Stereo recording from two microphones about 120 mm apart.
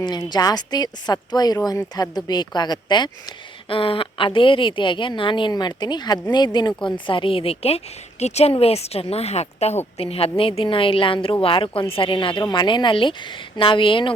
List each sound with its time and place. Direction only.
0.0 s a woman's voice: 35° left (ahead or behind)